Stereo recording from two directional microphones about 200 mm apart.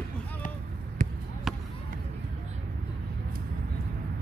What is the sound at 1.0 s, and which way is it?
Basketball bounce, 40° right (ahead or behind).